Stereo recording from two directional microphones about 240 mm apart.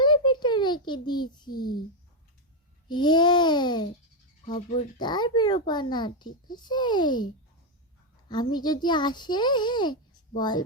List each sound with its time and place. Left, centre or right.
0.0 s a sound: centre
1.5 s a child's voice: left
2.9 s a child's voice: centre
8.3 s a child's voice: centre